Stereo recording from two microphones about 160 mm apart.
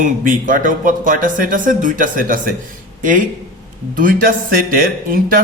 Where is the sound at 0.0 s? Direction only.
55° right (ahead or behind).